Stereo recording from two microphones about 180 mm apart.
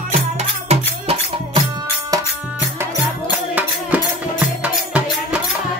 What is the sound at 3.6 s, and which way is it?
Music, 10° right (ahead or behind).